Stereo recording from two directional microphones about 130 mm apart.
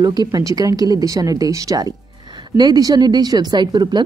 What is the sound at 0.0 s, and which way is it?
Speech, 30° right (ahead or behind).